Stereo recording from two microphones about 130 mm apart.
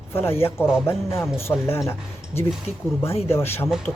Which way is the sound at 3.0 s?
20° left (ahead or behind).